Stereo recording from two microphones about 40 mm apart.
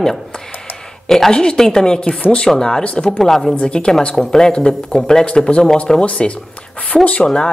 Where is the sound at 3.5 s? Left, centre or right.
Left.